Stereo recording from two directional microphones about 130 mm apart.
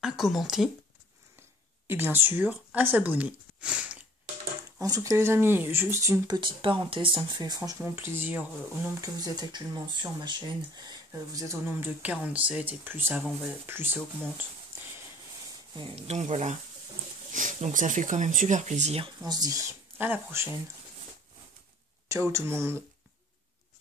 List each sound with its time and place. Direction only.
0.0 s speech: centre (ahead or behind)
1.9 s speech: 15° right (ahead or behind)
4.7 s speech: 25° right (ahead or behind)
7.8 s speech: 15° right (ahead or behind)
15.7 s speech: 40° right (ahead or behind)
16.1 s speech: 60° right (ahead or behind)
17.3 s speech: 80° right; by 19.0 s 60° right (ahead or behind)
19.0 s speech: 30° right (ahead or behind)
20.0 s speech: 15° right (ahead or behind)
22.0 s speech: 20° right (ahead or behind)